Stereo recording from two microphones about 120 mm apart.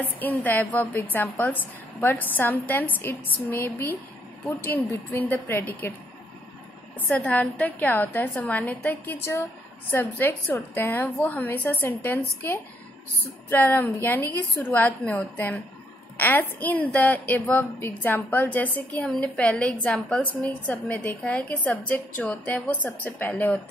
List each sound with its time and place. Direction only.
0.2 s a woman's voice: 15° left (ahead or behind)
7.1 s a woman's voice: 10° left (ahead or behind)